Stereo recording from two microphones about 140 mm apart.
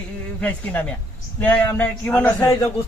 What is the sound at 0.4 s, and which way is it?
A man's voice, 10° left (ahead or behind).